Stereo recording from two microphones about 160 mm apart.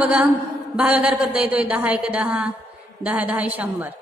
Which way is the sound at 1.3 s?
10° right (ahead or behind).